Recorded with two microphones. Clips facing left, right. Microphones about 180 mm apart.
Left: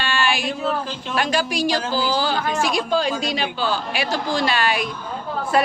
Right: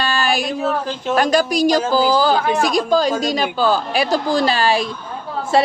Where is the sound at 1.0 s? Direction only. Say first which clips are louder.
Right 7 dB; 40° right (ahead or behind).